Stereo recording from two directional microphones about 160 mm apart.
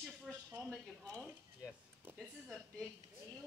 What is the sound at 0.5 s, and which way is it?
Speech, 20° right (ahead or behind).